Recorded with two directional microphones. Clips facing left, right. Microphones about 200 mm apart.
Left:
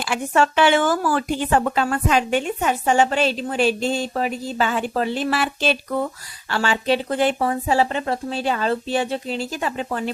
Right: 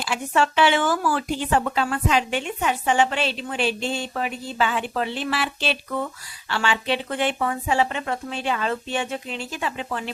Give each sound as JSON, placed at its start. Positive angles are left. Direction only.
{"t": 0.0, "sound": "speech", "side_deg": 50}